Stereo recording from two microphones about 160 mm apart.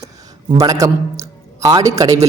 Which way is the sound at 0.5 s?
20° right (ahead or behind).